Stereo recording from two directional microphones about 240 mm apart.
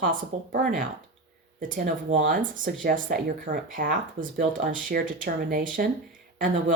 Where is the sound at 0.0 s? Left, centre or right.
Right.